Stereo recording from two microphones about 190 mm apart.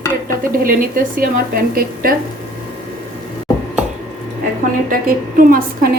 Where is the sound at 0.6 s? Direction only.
50° right (ahead or behind).